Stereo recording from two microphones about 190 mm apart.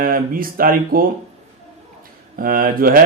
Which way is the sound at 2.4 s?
50° right (ahead or behind).